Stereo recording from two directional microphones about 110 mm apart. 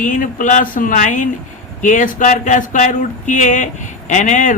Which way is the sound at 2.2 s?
90° left.